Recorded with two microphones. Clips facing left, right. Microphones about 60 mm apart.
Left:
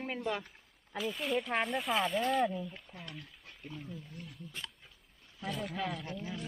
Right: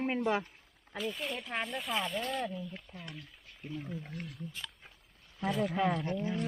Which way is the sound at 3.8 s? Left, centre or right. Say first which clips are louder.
Right 5 dB; right.